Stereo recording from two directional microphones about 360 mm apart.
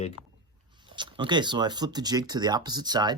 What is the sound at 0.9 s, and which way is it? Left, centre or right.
Speech, centre.